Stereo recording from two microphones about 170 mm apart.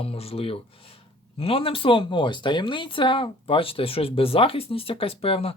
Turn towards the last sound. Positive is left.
turn(degrees=35)  # may be behind; listen again after turning